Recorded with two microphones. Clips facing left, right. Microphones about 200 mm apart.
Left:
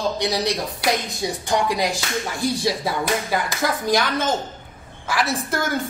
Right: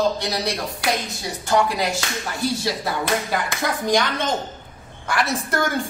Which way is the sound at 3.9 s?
5° left (ahead or behind).